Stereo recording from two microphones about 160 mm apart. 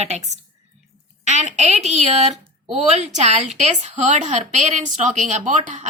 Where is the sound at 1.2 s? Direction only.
45° right (ahead or behind).